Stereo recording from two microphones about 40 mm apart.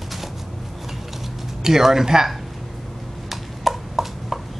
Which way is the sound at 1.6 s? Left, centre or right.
Centre.